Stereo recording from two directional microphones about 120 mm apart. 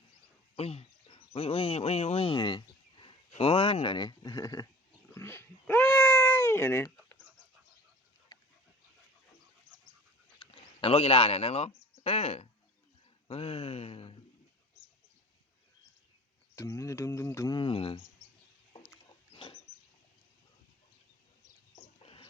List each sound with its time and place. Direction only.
0.5 s speech: 55° left (ahead or behind); by 4.6 s 30° left (ahead or behind)
5.1 s cat: 20° left (ahead or behind)
8.3 s dog: 30° left (ahead or behind)
10.4 s speech: 45° left (ahead or behind)
16.6 s speech: 25° left (ahead or behind)
17.5 s speech: 45° left (ahead or behind)
19.3 s a sound: 45° left (ahead or behind)
22.0 s a sound: 50° left (ahead or behind)